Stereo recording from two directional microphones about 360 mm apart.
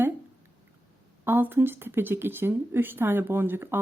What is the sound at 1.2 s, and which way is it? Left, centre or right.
Speech, centre.